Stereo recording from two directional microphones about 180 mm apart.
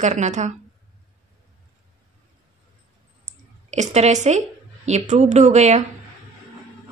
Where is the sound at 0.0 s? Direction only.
40° right (ahead or behind).